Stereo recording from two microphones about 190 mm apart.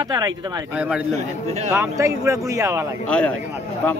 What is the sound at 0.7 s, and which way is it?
Speech, 5° right (ahead or behind).